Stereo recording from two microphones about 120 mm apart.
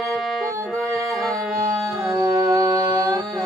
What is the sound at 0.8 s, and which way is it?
Music, centre (ahead or behind).